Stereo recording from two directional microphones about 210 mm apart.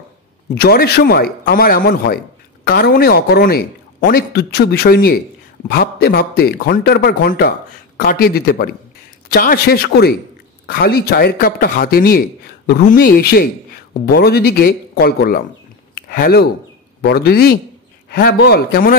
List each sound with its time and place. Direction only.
0.6 s a man's voice: 50° left (ahead or behind)
15.9 s a sound: 45° left (ahead or behind)
17.0 s a man's voice: 50° left (ahead or behind)